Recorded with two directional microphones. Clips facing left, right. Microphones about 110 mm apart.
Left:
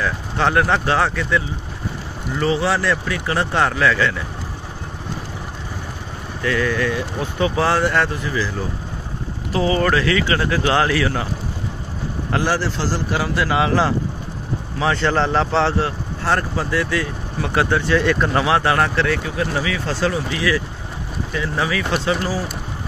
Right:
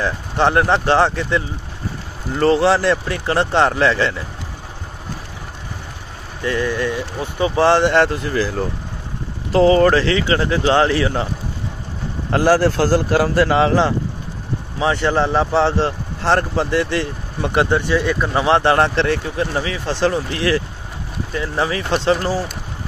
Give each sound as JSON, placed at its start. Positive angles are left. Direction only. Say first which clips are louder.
{"t": 0.0, "sound": "speech", "louder": "right 3 dB", "side_deg": -25}
{"t": 2.3, "sound": "a man's voice", "louder": "right 5 dB", "side_deg": -45}
{"t": 2.7, "sound": "speech", "louder": "right 3 dB", "side_deg": -30}
{"t": 6.4, "sound": "speech", "louder": "even", "side_deg": -25}
{"t": 8.3, "sound": "a man's voice", "louder": "right 3 dB", "side_deg": -45}
{"t": 12.3, "sound": "a man's voice", "louder": "right 7 dB", "side_deg": -45}
{"t": 14.8, "sound": "speech", "louder": "right 1 dB", "side_deg": -20}
{"t": 15.8, "sound": "speech", "louder": "right 3 dB", "side_deg": -30}
{"t": 17.5, "sound": "speech", "louder": "right 1 dB", "side_deg": -20}
{"t": 18.4, "sound": "speech", "louder": "right 6 dB", "side_deg": -25}
{"t": 20.1, "sound": "a man's voice", "louder": "right 2 dB", "side_deg": -50}
{"t": 21.3, "sound": "speech", "louder": "right 2 dB", "side_deg": -30}